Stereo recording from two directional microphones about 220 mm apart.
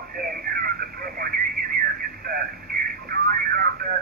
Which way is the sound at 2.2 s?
45° right (ahead or behind).